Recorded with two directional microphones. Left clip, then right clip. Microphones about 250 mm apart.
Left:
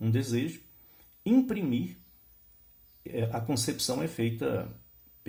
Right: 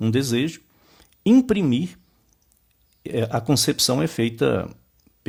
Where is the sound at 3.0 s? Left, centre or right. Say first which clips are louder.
Right 10 dB; right.